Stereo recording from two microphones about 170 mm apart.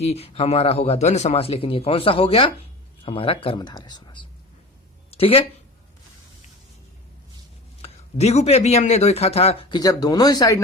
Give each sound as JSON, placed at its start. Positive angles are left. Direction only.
{"t": 0.0, "sound": "speech", "side_deg": 35}
{"t": 7.8, "sound": "speech", "side_deg": 40}